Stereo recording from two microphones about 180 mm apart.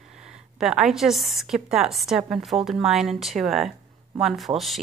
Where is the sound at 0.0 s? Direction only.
5° right (ahead or behind).